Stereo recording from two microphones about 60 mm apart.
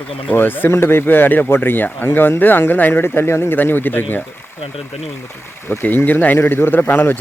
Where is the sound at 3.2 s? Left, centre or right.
Left.